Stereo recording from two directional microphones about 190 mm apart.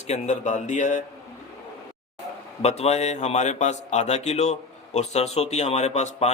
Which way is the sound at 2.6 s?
35° left (ahead or behind).